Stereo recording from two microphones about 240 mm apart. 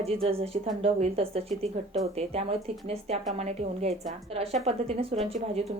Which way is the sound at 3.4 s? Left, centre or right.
Right.